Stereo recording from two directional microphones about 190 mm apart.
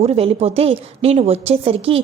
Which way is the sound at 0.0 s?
35° right (ahead or behind).